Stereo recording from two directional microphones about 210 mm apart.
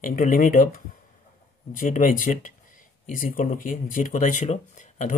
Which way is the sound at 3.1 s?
40° left (ahead or behind).